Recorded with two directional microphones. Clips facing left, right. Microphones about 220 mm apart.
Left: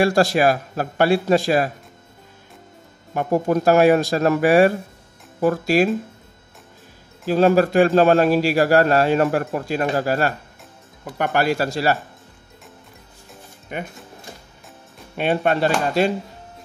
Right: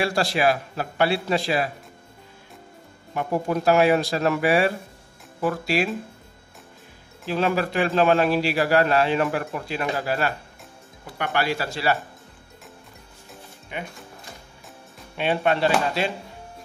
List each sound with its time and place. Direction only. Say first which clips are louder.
0.0 s a man's voice: left 5 dB; 45° left (ahead or behind)
3.2 s a man's voice: left 5 dB; 45° left (ahead or behind)
7.2 s a man's voice: left 8 dB; 40° left (ahead or behind)
13.7 s a man's voice: left 4 dB; 50° left (ahead or behind)
15.1 s a man's voice: left 3 dB; 45° left (ahead or behind)